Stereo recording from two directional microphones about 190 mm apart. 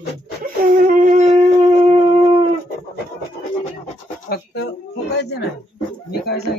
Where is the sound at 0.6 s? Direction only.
45° right (ahead or behind).